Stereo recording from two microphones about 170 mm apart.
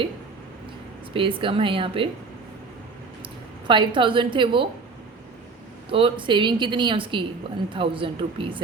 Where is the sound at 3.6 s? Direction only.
25° right (ahead or behind).